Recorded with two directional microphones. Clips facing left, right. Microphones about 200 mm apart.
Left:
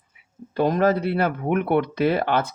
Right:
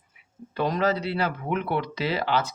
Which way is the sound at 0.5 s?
50° left (ahead or behind).